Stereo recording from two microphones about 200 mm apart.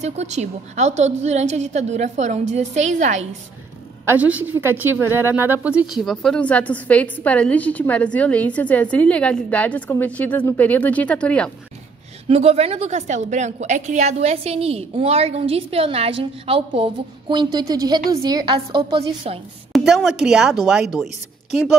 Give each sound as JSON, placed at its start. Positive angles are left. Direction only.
{"t": 0.0, "sound": "a woman's voice", "side_deg": -35}
{"t": 4.0, "sound": "a woman's voice", "side_deg": -10}
{"t": 12.3, "sound": "a woman's voice", "side_deg": -30}
{"t": 19.7, "sound": "a woman's voice", "side_deg": 0}